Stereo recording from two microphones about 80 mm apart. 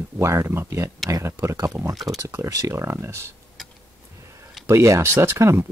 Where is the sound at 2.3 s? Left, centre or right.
Right.